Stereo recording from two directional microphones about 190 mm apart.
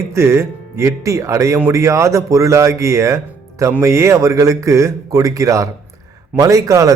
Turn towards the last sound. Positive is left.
turn(degrees=-15)  # may be behind; listen again after turning